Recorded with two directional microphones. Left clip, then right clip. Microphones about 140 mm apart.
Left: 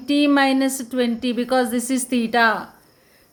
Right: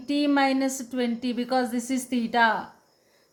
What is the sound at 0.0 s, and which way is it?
A woman's voice, 25° left (ahead or behind).